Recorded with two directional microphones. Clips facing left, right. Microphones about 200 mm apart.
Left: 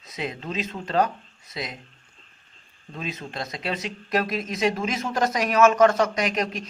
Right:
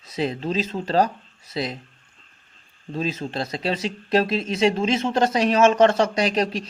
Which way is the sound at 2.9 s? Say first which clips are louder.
Right 6 dB; 30° right (ahead or behind).